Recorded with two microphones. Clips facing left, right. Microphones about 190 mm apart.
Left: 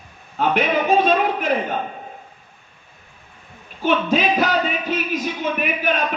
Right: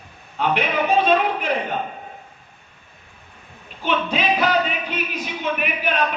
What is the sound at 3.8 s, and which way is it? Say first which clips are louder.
A man's voice: left 3 dB; 45° left (ahead or behind).